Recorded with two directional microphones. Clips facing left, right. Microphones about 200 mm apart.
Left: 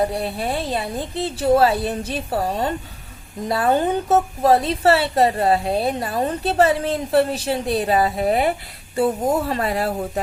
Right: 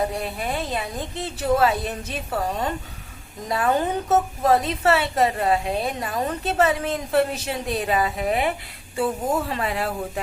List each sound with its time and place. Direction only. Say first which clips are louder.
0.1 s a woman's voice: left 4 dB; 35° left (ahead or behind)